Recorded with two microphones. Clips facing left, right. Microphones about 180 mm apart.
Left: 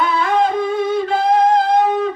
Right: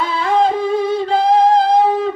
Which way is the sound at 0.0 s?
30° right (ahead or behind).